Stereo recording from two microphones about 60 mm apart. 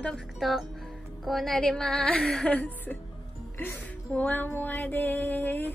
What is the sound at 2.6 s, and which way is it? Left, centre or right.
A woman's voice, left.